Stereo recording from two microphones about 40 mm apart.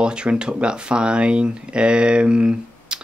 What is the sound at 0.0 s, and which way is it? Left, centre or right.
Speech, right.